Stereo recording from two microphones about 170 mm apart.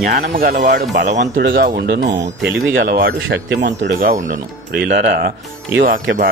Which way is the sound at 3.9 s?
50° right (ahead or behind).